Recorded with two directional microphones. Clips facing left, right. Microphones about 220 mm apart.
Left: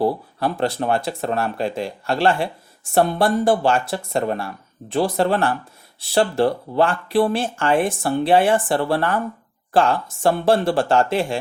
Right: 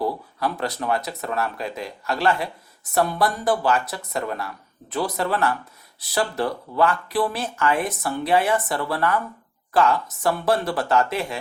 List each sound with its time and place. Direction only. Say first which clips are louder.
0.0 s speech: left 5 dB; 30° left (ahead or behind)